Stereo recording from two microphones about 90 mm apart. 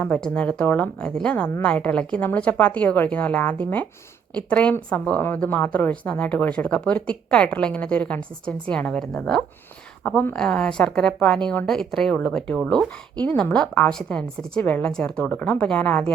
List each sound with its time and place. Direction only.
0.2 s speech: 15° left (ahead or behind)